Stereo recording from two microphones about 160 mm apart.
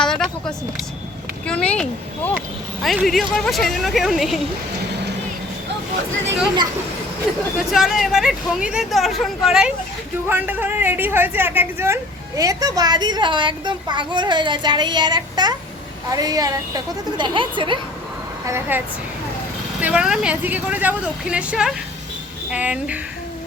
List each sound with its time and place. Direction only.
0.0 s vehicle: 5° left (ahead or behind)
1.5 s speech: 5° left (ahead or behind)
7.7 s a child's voice: centre (ahead or behind); by 17.7 s 30° right (ahead or behind)
18.4 s speech: 15° right (ahead or behind)
19.8 s speech: 5° right (ahead or behind)